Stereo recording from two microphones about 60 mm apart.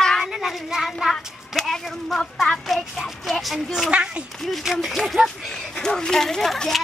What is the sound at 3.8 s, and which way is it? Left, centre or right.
Speech, centre.